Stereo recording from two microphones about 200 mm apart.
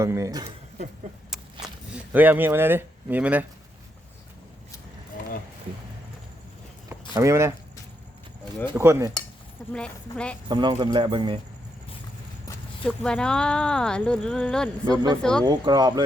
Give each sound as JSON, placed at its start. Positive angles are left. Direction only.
{"t": 0.0, "sound": "speech", "side_deg": -15}
{"t": 1.6, "sound": "speech", "side_deg": -5}
{"t": 7.1, "sound": "speech", "side_deg": -15}
{"t": 8.7, "sound": "speech", "side_deg": -10}
{"t": 9.7, "sound": "speech", "side_deg": 5}
{"t": 10.5, "sound": "speech", "side_deg": -20}
{"t": 12.5, "sound": "speech", "side_deg": 5}
{"t": 14.8, "sound": "speech", "side_deg": -20}
{"t": 15.2, "sound": "speech", "side_deg": 5}
{"t": 15.4, "sound": "speech", "side_deg": -20}